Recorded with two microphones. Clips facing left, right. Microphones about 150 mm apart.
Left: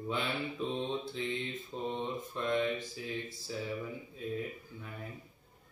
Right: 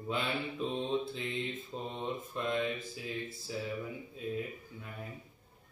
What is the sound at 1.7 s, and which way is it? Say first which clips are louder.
Mantra: left 4 dB; 5° right (ahead or behind).